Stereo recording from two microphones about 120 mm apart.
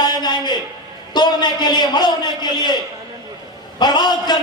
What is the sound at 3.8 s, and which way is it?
Speech, 35° left (ahead or behind).